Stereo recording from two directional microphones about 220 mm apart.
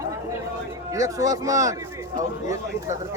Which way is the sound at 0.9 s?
15° right (ahead or behind).